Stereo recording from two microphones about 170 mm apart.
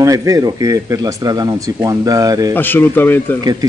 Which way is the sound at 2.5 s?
10° left (ahead or behind).